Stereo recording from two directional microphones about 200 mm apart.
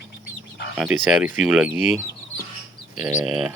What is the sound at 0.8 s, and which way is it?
Speech, 5° right (ahead or behind).